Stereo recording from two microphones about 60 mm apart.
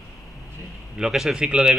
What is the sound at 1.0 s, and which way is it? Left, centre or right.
Speech, centre.